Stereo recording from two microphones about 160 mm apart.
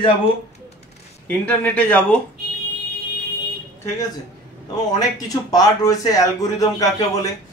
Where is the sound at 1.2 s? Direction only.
10° left (ahead or behind).